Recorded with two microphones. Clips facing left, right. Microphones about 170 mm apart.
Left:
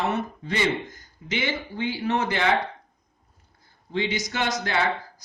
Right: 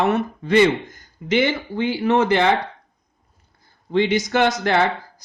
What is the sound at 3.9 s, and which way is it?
Speech, 60° right (ahead or behind).